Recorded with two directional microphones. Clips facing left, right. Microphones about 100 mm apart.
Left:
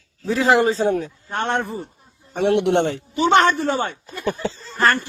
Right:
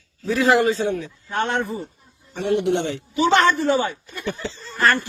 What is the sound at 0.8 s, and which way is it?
Speech, 45° left (ahead or behind).